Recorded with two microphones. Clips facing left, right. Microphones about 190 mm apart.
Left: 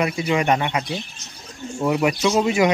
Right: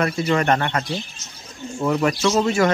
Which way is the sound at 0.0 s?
10° left (ahead or behind).